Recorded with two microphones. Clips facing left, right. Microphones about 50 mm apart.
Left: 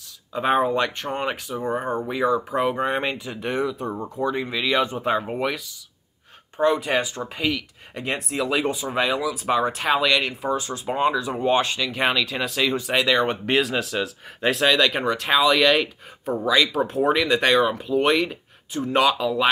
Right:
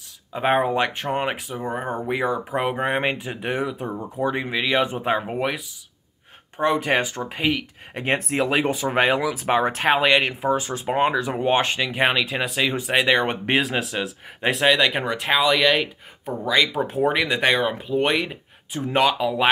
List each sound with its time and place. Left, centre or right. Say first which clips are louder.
0.3 s speech: even; right
1.6 s speech: left 4 dB; centre
2.0 s speech: left 1 dB; right
5.2 s speech: even; centre
6.5 s speech: even; right
13.8 s speech: left 1 dB; centre
18.7 s speech: left 1 dB; right
18.9 s speech: even; centre